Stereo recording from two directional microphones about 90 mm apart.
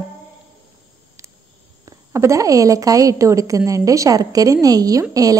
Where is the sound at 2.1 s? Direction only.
35° right (ahead or behind).